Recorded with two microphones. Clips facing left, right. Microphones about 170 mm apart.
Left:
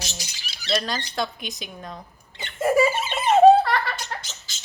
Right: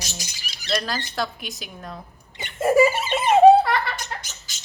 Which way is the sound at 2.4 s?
10° right (ahead or behind).